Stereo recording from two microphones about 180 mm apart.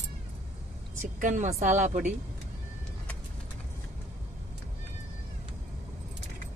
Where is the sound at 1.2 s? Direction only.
40° right (ahead or behind).